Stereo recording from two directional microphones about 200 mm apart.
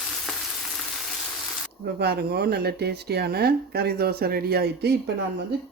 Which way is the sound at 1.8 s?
55° right (ahead or behind).